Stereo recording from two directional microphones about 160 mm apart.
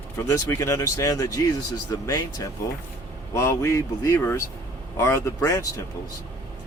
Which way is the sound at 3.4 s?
15° left (ahead or behind).